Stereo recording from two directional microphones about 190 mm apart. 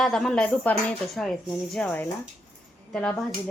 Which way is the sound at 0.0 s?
5° left (ahead or behind).